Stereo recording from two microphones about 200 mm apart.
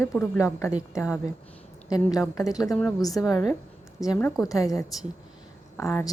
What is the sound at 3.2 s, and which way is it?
A woman's voice, 20° left (ahead or behind).